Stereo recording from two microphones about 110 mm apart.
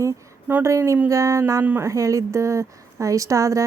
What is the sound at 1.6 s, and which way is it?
Speech, 15° right (ahead or behind).